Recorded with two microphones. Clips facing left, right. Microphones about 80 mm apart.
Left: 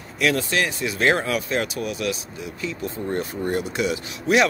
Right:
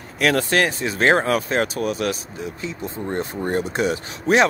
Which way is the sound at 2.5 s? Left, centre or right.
Right.